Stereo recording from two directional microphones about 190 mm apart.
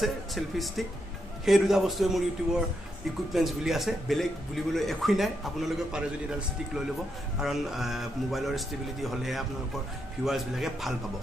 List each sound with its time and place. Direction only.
0.0 s a man's voice: centre (ahead or behind)
7.3 s a man's voice: centre (ahead or behind)